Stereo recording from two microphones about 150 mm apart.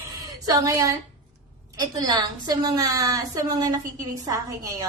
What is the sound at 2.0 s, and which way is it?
A woman's voice, 25° right (ahead or behind).